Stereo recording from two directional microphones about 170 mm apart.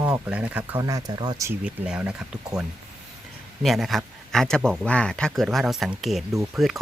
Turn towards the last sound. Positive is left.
turn(degrees=0)  # may be behind; listen again after turning